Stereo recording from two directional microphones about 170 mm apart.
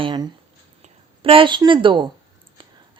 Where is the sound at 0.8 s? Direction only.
30° right (ahead or behind).